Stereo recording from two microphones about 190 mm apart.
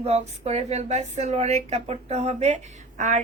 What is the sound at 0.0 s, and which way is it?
Speech, 35° right (ahead or behind).